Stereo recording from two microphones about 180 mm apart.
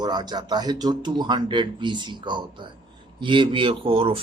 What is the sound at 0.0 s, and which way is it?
Speech, 25° right (ahead or behind).